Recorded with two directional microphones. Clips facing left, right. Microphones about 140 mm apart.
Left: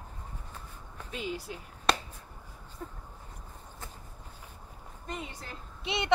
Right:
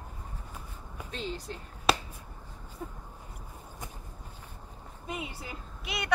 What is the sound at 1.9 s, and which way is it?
Finger snapping, 5° right (ahead or behind).